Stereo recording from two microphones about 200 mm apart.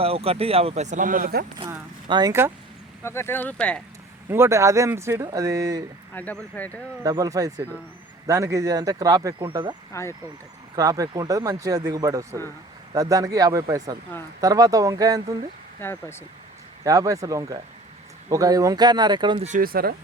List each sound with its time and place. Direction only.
0.0 s speech: 30° right (ahead or behind); by 1.5 s 45° right (ahead or behind)
1.6 s speech: 20° right (ahead or behind)
3.0 s speech: 10° left (ahead or behind)
4.3 s speech: 15° right (ahead or behind)
6.1 s speech: 10° left (ahead or behind)
6.7 s speech: 20° right (ahead or behind)
9.9 s speech: 15° left (ahead or behind)
10.8 s speech: 15° right (ahead or behind)
15.8 s speech: 10° left (ahead or behind)
16.8 s speech: 15° right (ahead or behind)
19.5 s speech: 45° right (ahead or behind)